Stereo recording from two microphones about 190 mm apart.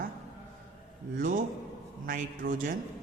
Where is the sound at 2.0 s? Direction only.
45° right (ahead or behind).